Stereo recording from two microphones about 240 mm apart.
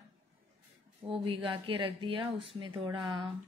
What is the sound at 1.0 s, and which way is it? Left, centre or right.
A woman's voice, right.